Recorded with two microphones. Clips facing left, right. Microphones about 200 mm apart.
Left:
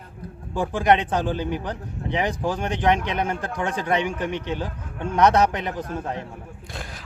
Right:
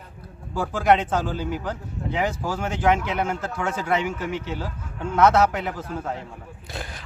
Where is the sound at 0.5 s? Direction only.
15° left (ahead or behind).